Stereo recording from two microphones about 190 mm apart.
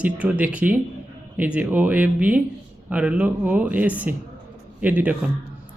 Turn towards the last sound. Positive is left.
turn(degrees=-10)  # may be behind; listen again after turning